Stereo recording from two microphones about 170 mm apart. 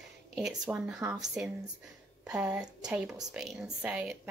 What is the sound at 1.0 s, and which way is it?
Speech, 15° right (ahead or behind).